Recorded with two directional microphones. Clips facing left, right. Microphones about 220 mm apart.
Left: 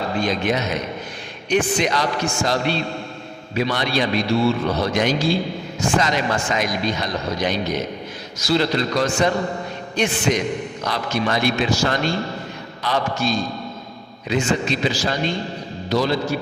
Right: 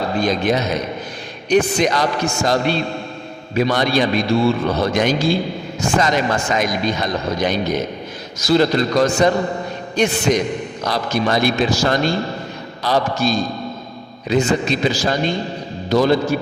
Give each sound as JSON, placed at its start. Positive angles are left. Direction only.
{"t": 0.2, "sound": "a man's voice", "side_deg": -40}